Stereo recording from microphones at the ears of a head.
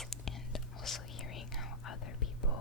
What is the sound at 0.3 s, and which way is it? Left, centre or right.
Whispering, left.